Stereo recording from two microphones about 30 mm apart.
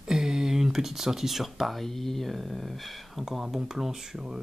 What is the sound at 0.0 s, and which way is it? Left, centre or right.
Speech, centre.